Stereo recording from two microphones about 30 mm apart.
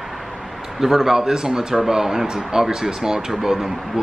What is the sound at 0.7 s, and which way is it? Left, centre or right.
Speech, centre.